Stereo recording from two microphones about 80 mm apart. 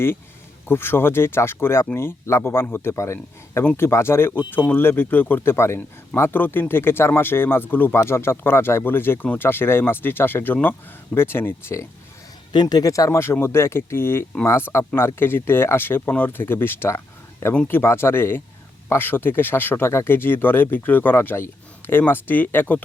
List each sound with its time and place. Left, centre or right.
0.6 s a man's voice: left
12.6 s speech: left
13.1 s a man's voice: left